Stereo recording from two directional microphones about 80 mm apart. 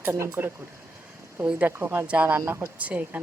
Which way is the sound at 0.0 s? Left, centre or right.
Right.